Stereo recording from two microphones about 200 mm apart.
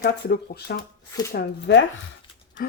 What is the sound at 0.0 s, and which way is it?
Speech, 55° left (ahead or behind).